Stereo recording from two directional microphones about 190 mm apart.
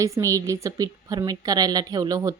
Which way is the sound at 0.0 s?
15° right (ahead or behind).